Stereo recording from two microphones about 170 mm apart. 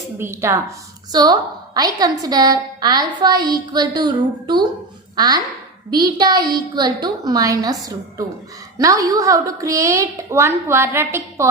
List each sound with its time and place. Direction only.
0.2 s a woman's voice: 15° right (ahead or behind)